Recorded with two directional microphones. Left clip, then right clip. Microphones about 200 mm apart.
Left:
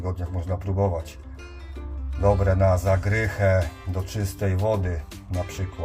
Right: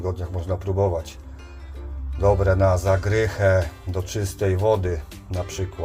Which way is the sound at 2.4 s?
10° right (ahead or behind).